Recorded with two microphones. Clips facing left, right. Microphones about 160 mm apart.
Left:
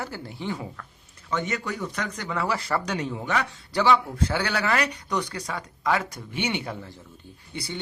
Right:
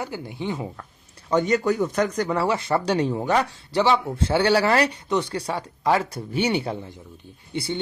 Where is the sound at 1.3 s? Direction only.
35° right (ahead or behind).